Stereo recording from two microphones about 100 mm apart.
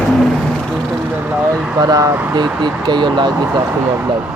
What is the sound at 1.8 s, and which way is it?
Speech, 40° right (ahead or behind).